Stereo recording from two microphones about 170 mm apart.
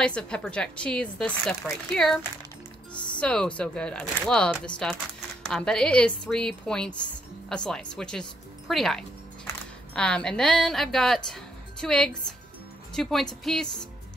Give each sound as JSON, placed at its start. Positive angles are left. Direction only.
{"t": 0.0, "sound": "speech", "side_deg": 5}
{"t": 2.9, "sound": "music", "side_deg": 25}
{"t": 3.2, "sound": "speech", "side_deg": 5}